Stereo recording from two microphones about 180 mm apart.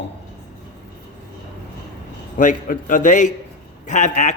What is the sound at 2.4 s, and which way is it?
A man's voice, 50° left (ahead or behind).